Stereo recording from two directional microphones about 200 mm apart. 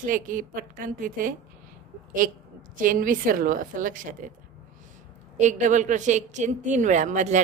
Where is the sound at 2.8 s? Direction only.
45° right (ahead or behind).